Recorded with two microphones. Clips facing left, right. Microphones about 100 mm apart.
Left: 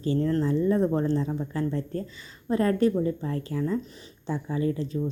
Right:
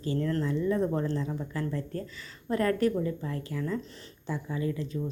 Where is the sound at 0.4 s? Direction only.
30° left (ahead or behind).